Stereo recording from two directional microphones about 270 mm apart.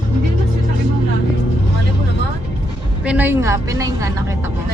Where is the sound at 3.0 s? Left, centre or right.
Centre.